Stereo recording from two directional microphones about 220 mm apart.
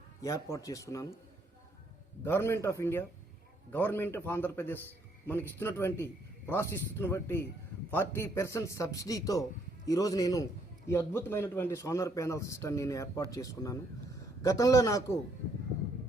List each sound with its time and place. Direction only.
0.2 s a man's voice: 15° left (ahead or behind)
2.2 s a man's voice: 10° left (ahead or behind)